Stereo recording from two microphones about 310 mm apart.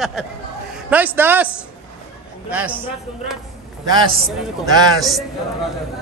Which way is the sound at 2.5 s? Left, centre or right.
Centre.